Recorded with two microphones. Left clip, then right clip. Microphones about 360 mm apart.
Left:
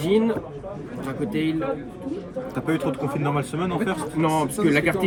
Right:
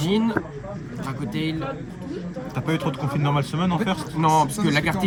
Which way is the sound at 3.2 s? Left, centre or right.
Centre.